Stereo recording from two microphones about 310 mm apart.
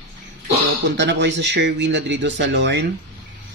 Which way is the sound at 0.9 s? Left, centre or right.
Right.